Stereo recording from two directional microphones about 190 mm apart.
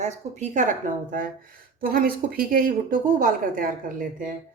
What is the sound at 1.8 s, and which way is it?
A woman's voice, 50° right (ahead or behind).